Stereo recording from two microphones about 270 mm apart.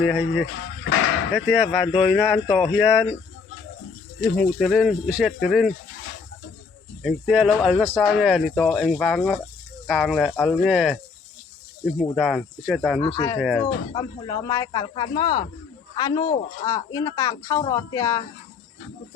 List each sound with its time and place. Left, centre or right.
0.0 s speech: centre
4.2 s speech: centre
7.0 s speech: centre
13.0 s speech: centre